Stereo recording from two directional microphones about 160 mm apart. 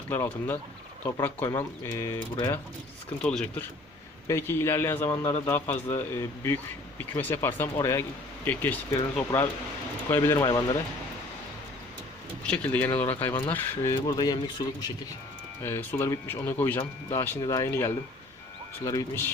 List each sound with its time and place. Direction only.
0.1 s a man's voice: 10° left (ahead or behind)
3.2 s a man's voice: 5° left (ahead or behind); by 10.8 s 25° left (ahead or behind)
12.5 s a man's voice: 10° left (ahead or behind); by 14.8 s 25° left (ahead or behind)
15.6 s a man's voice: 15° left (ahead or behind)